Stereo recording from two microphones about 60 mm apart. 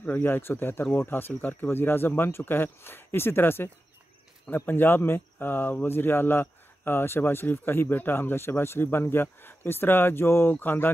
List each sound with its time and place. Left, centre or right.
0.0 s speech: left